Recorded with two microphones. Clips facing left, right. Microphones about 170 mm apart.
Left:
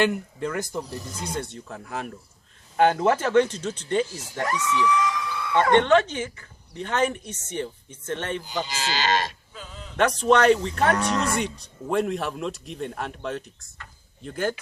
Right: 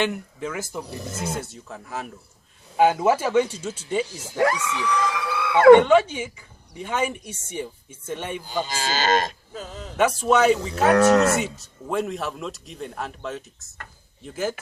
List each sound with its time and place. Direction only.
0.0 s speech: centre (ahead or behind)
0.9 s speech: 65° right (ahead or behind)
1.4 s speech: centre (ahead or behind)
4.4 s a sound: 85° right
5.7 s speech: 10° right (ahead or behind)
8.6 s speech: 45° right (ahead or behind)
10.0 s speech: 5° right (ahead or behind)
10.9 s moo: 75° right (ahead or behind)
11.3 s speech: 5° right (ahead or behind)